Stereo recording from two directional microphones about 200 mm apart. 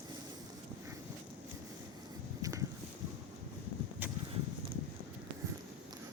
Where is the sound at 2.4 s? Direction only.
15° right (ahead or behind).